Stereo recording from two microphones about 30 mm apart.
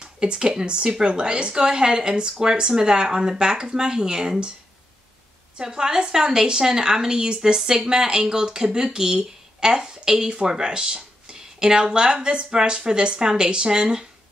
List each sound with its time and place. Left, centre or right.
0.0 s a woman's voice: right
5.6 s a woman's voice: right